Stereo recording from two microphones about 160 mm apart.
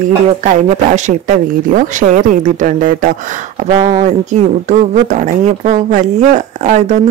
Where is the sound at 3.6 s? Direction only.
45° right (ahead or behind).